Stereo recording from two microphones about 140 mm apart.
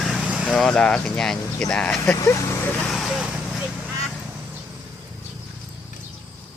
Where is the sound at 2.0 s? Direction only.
25° left (ahead or behind).